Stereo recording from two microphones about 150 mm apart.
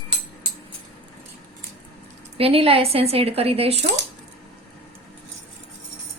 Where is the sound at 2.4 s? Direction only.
40° right (ahead or behind).